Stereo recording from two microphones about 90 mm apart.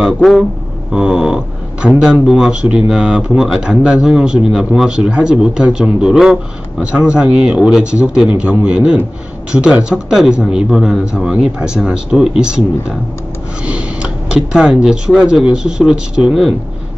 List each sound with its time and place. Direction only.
0.0 s speech: 5° right (ahead or behind)
13.7 s speech: 10° right (ahead or behind)